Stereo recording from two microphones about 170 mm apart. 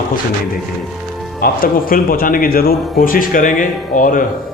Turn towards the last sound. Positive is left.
turn(degrees=50)  # may be behind; listen again after turning